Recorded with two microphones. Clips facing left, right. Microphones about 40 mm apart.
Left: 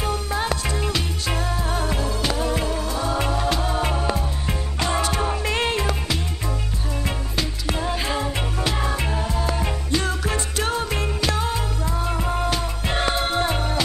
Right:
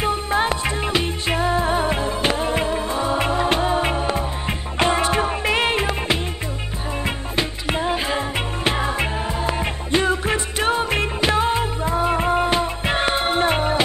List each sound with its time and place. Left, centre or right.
0.0 s music: right